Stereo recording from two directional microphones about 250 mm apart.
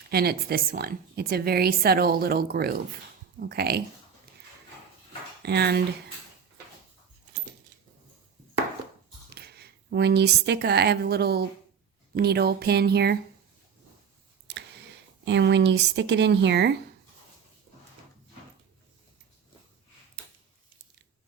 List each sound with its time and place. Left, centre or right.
0.1 s a woman's voice: right
5.4 s speech: right
9.9 s a woman's voice: right
14.5 s a sound: right
15.2 s speech: right